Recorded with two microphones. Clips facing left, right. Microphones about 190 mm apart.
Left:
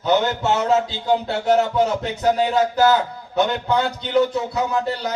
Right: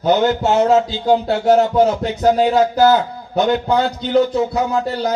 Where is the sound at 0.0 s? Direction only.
35° right (ahead or behind).